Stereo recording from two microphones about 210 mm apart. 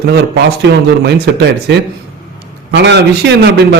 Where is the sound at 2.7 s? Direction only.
50° right (ahead or behind).